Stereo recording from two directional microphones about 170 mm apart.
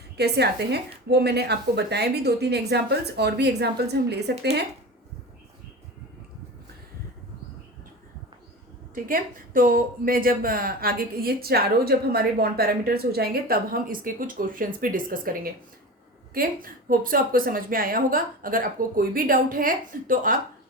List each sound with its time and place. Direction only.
0.2 s a woman's voice: 75° right (ahead or behind)
9.0 s speech: 55° right (ahead or behind)